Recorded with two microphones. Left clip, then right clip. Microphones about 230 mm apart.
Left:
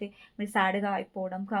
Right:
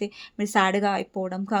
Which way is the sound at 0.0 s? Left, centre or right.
Right.